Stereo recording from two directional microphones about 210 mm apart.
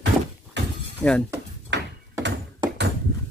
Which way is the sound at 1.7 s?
55° right (ahead or behind).